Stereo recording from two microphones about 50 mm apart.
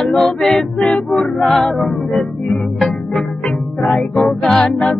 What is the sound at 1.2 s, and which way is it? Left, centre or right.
Music, centre.